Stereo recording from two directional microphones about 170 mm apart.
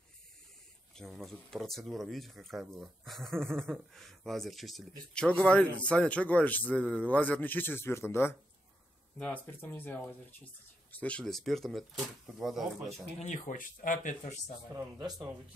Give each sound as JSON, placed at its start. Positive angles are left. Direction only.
{"t": 0.9, "sound": "a man's voice", "side_deg": 0}
{"t": 13.2, "sound": "speech", "side_deg": 50}
{"t": 15.0, "sound": "speech", "side_deg": -25}